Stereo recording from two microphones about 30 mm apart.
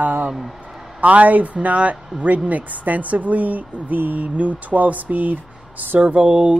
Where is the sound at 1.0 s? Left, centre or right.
Right.